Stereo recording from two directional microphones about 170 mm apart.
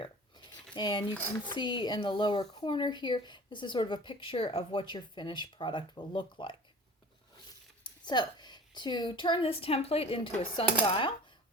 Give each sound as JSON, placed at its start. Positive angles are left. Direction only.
{"t": 0.0, "sound": "a sound", "side_deg": 25}
{"t": 1.5, "sound": "speech", "side_deg": 30}
{"t": 7.9, "sound": "a woman's voice", "side_deg": 25}
{"t": 10.6, "sound": "dishes", "side_deg": 30}